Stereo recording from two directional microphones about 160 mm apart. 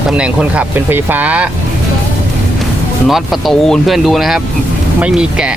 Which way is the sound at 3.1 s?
Centre (ahead or behind).